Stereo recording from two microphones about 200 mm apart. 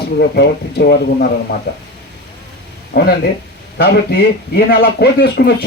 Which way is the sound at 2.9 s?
55° left (ahead or behind).